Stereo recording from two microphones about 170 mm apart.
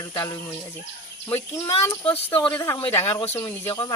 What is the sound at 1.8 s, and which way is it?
Speech, 15° left (ahead or behind).